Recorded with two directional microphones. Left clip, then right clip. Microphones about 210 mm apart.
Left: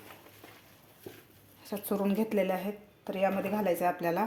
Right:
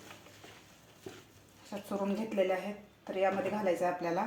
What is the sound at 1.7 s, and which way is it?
Speech, 55° left (ahead or behind).